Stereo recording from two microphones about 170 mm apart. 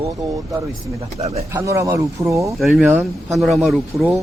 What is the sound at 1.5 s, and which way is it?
Speech, 15° right (ahead or behind).